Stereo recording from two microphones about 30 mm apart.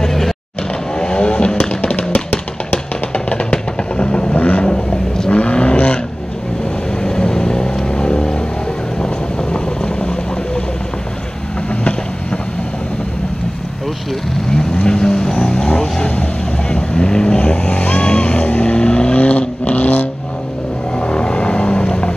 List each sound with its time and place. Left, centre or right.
0.0 s vehicle: centre
0.9 s vehicle: left
1.2 s vehicle: left
1.7 s music: left
3.1 s music: left
3.9 s vehicle: left
4.3 s vehicle: left
4.6 s vehicle: left
5.5 s vehicle: left
7.0 s vehicle: left
14.5 s vehicle: left
19.1 s vehicle: left
19.6 s vehicle: left
20.9 s vehicle: left